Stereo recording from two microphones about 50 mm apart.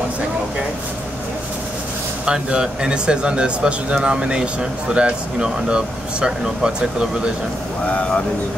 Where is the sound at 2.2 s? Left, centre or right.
Centre.